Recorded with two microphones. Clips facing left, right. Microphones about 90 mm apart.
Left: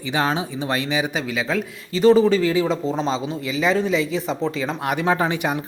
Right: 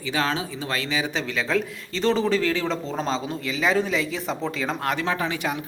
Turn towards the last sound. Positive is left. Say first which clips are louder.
# left 6 dB
turn(degrees=30)  # may be behind; listen again after turning